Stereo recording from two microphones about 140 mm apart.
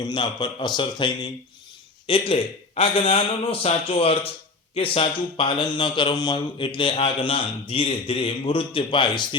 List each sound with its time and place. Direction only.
0.0 s a man's voice: 35° left (ahead or behind)